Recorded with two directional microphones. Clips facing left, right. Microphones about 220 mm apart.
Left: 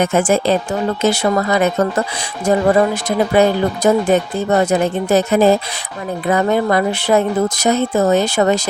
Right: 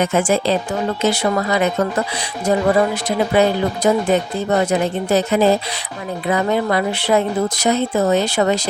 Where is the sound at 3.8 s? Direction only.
45° left (ahead or behind).